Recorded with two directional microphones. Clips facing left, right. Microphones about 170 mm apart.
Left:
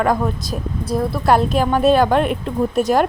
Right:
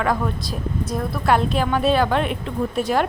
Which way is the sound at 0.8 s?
30° left (ahead or behind).